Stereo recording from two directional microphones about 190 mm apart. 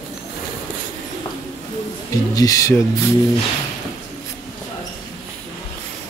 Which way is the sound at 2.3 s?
15° left (ahead or behind).